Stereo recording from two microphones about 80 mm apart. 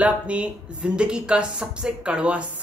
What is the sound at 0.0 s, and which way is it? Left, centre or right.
Speech, centre.